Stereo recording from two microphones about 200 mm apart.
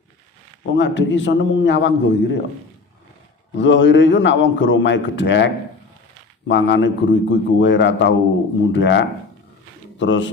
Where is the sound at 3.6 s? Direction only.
65° left (ahead or behind).